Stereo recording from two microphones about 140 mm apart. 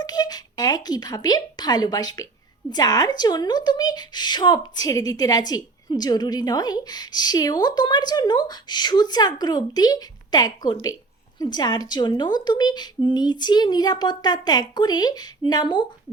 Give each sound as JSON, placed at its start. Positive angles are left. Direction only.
{"t": 0.0, "sound": "a woman's voice", "side_deg": 30}